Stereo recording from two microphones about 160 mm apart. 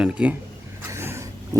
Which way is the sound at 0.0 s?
5° right (ahead or behind).